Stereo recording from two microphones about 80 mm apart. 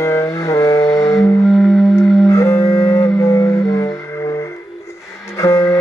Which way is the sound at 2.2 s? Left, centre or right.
Left.